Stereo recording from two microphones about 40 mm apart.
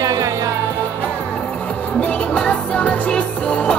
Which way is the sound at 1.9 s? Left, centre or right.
Left.